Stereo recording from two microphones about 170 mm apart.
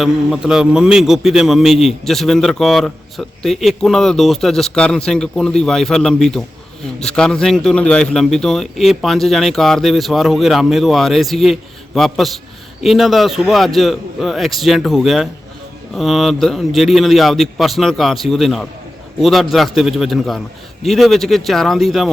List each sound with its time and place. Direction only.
0.0 s a man's voice: centre (ahead or behind)